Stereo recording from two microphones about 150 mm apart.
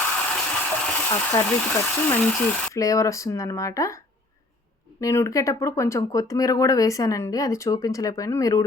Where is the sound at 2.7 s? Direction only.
20° left (ahead or behind).